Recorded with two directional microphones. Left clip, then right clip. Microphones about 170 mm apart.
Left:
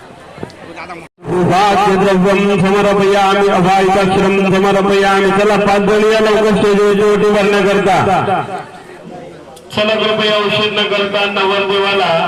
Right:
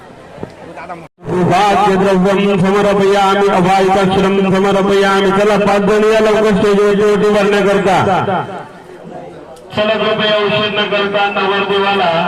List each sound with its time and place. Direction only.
1.6 s a man's voice: 25° left (ahead or behind)
9.7 s a man's voice: 35° left (ahead or behind)